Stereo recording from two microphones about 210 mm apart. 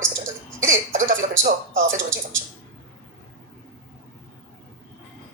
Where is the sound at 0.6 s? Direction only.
35° right (ahead or behind).